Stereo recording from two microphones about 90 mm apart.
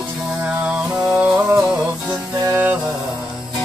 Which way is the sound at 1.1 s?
30° right (ahead or behind).